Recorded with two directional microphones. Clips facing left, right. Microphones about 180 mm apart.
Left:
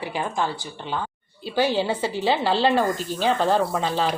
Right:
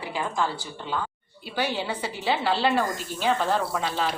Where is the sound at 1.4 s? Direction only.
30° left (ahead or behind).